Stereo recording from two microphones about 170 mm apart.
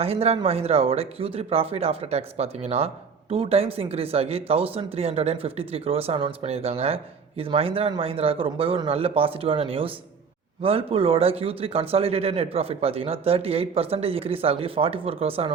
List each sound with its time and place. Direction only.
0.0 s speech: 35° right (ahead or behind)